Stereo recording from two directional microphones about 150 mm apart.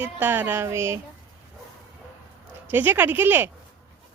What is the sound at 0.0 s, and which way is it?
Speech, 10° right (ahead or behind).